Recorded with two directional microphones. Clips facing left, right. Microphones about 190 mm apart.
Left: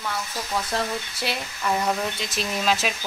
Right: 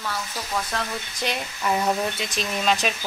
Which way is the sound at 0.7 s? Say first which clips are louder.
Left 6 dB; 30° left (ahead or behind).